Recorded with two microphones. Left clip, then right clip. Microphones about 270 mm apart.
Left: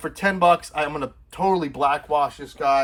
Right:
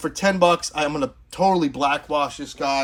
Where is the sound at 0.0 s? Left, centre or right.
Centre.